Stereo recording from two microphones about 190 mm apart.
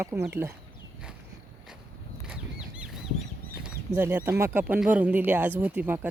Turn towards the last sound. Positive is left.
turn(degrees=-10)  # may be behind; listen again after turning